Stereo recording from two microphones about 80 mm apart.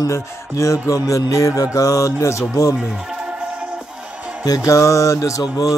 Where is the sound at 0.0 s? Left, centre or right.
Left.